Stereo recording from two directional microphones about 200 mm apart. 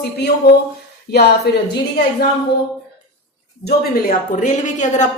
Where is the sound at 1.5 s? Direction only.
55° left (ahead or behind).